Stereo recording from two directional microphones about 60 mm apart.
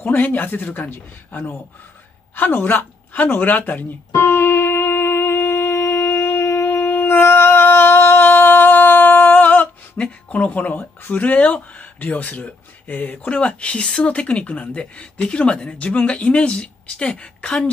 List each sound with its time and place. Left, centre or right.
0.0 s speech: left
4.1 s music: left
9.9 s speech: left